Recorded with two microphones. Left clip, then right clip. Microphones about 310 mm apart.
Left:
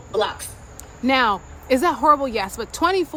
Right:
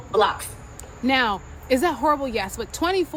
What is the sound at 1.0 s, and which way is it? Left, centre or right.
Speech, centre.